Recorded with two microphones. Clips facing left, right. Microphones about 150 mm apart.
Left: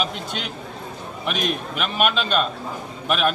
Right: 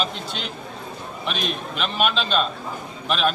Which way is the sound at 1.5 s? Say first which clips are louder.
Left 2 dB; 5° left (ahead or behind).